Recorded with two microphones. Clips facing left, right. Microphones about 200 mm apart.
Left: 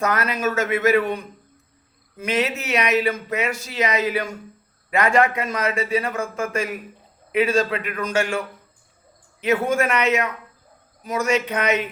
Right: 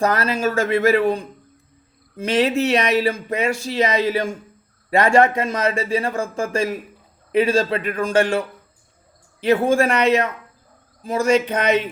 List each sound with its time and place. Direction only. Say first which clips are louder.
0.0 s speech: right 3 dB; 30° right (ahead or behind)
9.4 s speech: right 4 dB; 30° right (ahead or behind)